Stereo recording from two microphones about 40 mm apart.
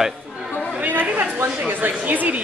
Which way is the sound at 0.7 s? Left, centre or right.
Right.